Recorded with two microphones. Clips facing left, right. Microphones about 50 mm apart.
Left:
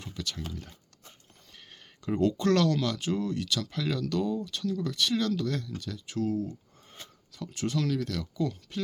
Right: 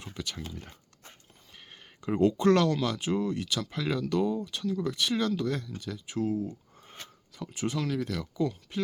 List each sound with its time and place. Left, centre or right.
0.0 s speech: right
2.0 s speech: centre